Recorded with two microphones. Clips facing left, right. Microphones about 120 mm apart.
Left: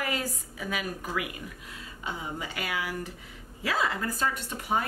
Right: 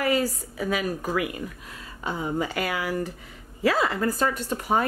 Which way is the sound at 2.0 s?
50° right (ahead or behind).